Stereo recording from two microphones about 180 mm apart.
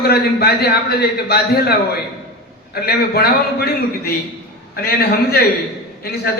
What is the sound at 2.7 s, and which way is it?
A man's voice, 60° left (ahead or behind).